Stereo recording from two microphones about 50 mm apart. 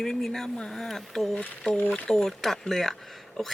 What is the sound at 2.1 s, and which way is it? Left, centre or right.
Speech, centre.